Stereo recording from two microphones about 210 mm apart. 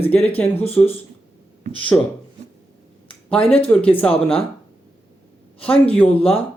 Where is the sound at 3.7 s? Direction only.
10° left (ahead or behind).